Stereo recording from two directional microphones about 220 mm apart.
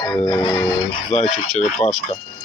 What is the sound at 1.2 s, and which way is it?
Speech, 35° left (ahead or behind).